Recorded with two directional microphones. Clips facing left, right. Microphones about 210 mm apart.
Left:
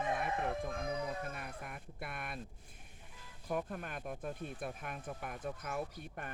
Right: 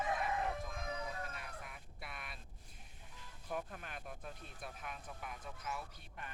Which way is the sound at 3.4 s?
50° left (ahead or behind).